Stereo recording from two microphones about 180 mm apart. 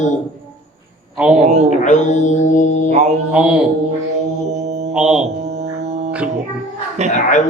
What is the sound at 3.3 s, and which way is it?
Mantra, 5° right (ahead or behind).